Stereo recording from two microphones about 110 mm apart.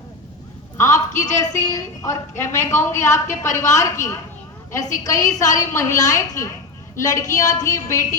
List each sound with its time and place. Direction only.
0.8 s a woman's voice: 30° left (ahead or behind)